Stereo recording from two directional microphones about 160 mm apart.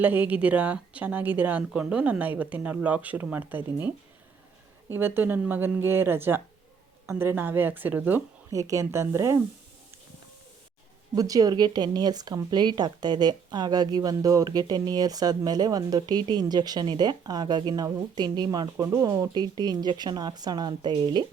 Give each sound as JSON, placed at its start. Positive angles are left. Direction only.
{"t": 0.0, "sound": "speech", "side_deg": -10}
{"t": 4.9, "sound": "speech", "side_deg": -15}
{"t": 11.1, "sound": "speech", "side_deg": -25}